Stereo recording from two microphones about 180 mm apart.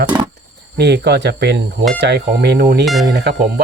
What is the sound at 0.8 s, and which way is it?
Speech, 65° right (ahead or behind).